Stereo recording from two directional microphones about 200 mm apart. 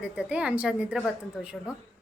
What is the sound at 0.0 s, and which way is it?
Speech, 5° right (ahead or behind).